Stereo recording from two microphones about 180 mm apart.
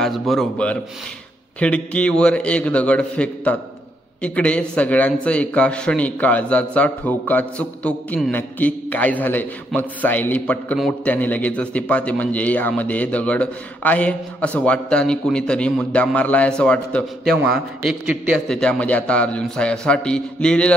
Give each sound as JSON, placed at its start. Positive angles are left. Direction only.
{"t": 0.0, "sound": "a man's voice", "side_deg": 0}